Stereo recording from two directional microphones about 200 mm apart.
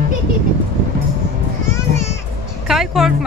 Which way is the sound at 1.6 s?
15° left (ahead or behind).